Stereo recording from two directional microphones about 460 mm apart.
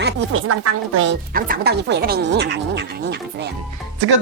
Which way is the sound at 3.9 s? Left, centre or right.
Right.